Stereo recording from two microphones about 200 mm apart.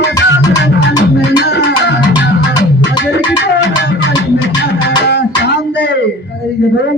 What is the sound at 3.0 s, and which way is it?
Music, 60° left (ahead or behind).